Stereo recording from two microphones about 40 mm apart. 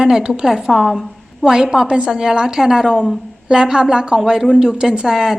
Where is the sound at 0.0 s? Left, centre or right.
Centre.